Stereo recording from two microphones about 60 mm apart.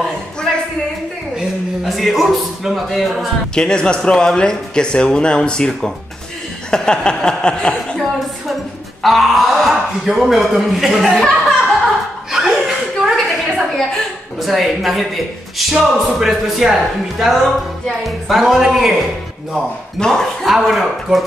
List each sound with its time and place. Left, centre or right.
1.9 s speech: centre
3.5 s speech: centre
9.0 s speech: centre
12.3 s chuckle: centre
13.7 s a sound: centre
15.5 s speech: centre
20.0 s speech: centre
20.4 s speech: centre